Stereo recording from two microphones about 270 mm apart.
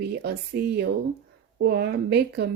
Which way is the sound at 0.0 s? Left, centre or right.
Right.